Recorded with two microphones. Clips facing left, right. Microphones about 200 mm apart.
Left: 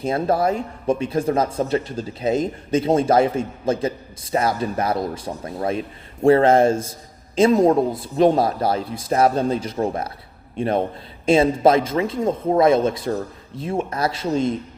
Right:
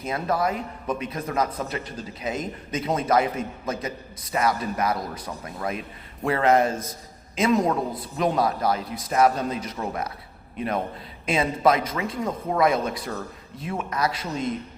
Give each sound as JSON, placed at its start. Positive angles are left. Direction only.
{"t": 0.0, "sound": "speech", "side_deg": 30}